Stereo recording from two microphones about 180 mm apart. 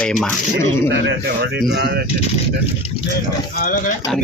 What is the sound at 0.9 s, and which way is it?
A man's voice, 70° right (ahead or behind).